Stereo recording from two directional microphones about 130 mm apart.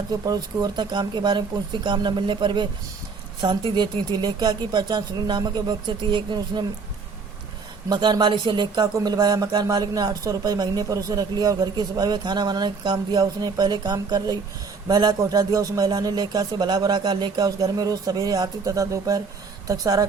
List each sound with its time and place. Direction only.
0.1 s speech: 30° right (ahead or behind)
7.9 s a man's voice: 35° right (ahead or behind)